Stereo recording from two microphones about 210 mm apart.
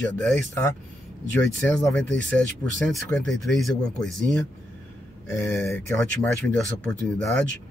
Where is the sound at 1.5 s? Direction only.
5° left (ahead or behind).